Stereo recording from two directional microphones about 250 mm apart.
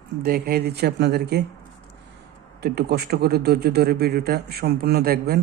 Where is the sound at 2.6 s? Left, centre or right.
Right.